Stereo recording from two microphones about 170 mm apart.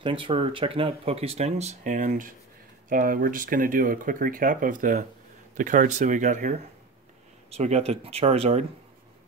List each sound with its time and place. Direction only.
0.0 s speech: 30° right (ahead or behind); by 6.5 s 45° right (ahead or behind)
7.5 s speech: 40° right (ahead or behind)